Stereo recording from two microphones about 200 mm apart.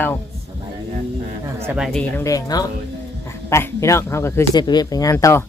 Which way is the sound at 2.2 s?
20° left (ahead or behind).